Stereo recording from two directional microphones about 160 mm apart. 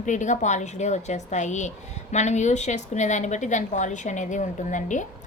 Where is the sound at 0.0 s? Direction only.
50° left (ahead or behind).